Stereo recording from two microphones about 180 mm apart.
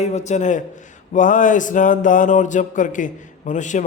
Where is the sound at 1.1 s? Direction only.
45° left (ahead or behind).